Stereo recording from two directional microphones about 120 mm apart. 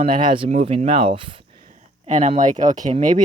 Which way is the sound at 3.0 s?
90° right.